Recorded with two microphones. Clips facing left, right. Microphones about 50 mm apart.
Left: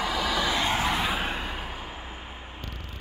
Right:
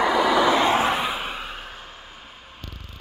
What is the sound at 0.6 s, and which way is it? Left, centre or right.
Vehicle, right.